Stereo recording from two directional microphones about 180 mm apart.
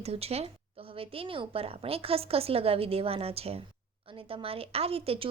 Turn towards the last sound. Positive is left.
turn(degrees=-30)  # may be behind; listen again after turning